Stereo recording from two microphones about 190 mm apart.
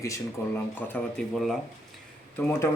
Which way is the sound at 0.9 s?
Centre (ahead or behind).